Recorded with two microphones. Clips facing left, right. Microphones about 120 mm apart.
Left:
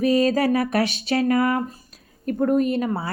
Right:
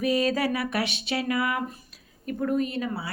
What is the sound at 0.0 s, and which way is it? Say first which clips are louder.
Speech: left 6 dB; 40° left (ahead or behind).